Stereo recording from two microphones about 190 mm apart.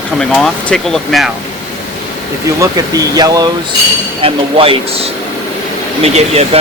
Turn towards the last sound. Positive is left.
turn(degrees=-30)  # may be behind; listen again after turning